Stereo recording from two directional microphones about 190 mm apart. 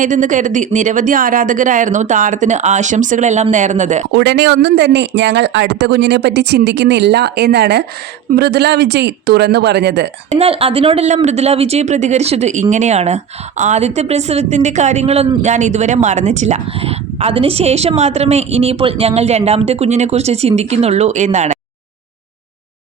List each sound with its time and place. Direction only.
0.0 s a woman's voice: 40° right (ahead or behind)
4.1 s speech: 65° right (ahead or behind)
10.2 s a woman's voice: 30° right (ahead or behind)